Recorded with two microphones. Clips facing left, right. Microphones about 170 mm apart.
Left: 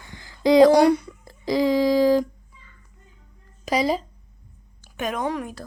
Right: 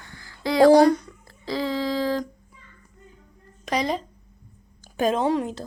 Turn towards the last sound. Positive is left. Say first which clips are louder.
# right 4 dB
turn(degrees=-25)  # may be behind; listen again after turning